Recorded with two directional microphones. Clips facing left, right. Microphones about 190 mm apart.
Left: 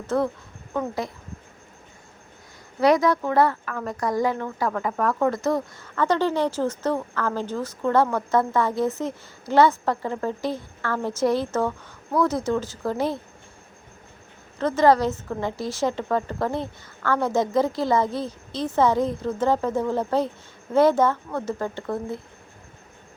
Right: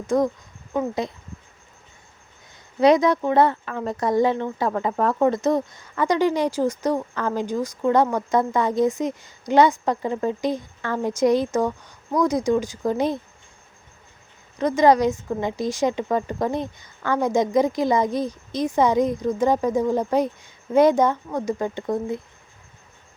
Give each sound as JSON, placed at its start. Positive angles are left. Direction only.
{"t": 0.1, "sound": "speech", "side_deg": -15}
{"t": 2.8, "sound": "speech", "side_deg": -20}
{"t": 14.6, "sound": "speech", "side_deg": -15}